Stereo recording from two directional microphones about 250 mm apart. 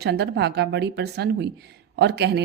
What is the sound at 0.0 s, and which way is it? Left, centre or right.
A woman's voice, right.